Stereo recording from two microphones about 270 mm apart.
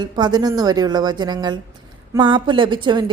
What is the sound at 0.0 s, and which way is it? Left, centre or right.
A woman's voice, centre.